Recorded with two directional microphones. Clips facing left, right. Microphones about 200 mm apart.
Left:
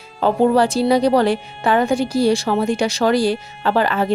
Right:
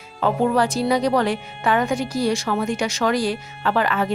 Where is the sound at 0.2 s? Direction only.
30° left (ahead or behind).